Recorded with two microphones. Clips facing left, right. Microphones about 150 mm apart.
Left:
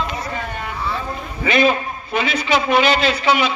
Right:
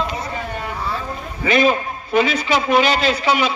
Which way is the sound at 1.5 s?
40° right (ahead or behind).